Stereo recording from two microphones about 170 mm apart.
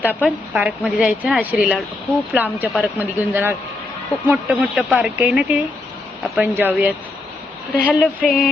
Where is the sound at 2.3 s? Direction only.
10° right (ahead or behind).